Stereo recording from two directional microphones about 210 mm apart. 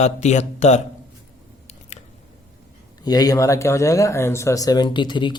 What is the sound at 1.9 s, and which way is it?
Scissors, 30° left (ahead or behind).